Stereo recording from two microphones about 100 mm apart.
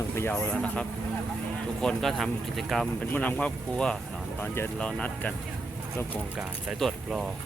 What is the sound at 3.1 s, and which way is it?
Speech, 15° left (ahead or behind).